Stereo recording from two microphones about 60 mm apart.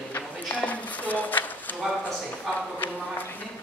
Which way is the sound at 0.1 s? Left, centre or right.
Left.